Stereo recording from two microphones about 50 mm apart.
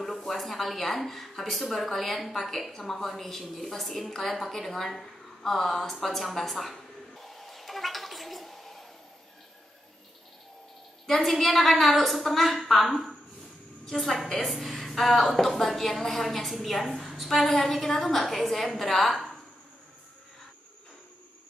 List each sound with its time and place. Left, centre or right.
0.0 s a woman's voice: centre
11.1 s a woman's voice: centre